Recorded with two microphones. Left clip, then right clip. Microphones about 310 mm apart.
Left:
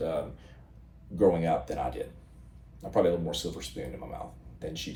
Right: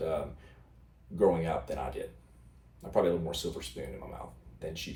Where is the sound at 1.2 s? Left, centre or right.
Centre.